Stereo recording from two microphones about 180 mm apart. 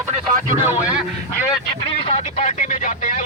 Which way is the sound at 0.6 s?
10° right (ahead or behind).